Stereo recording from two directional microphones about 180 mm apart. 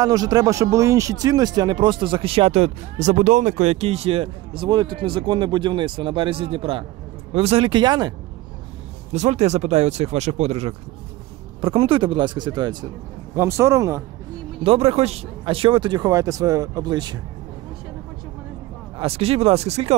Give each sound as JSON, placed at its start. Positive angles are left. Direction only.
{"t": 0.0, "sound": "speech", "side_deg": -20}
{"t": 9.1, "sound": "speech", "side_deg": -40}
{"t": 14.6, "sound": "speech", "side_deg": -30}
{"t": 18.9, "sound": "speech", "side_deg": -35}